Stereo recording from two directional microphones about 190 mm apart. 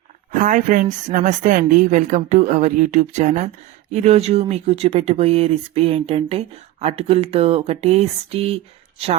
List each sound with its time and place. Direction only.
0.3 s speech: 40° right (ahead or behind)